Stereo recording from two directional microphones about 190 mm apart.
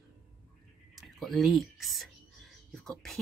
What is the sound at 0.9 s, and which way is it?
Speech, centre (ahead or behind).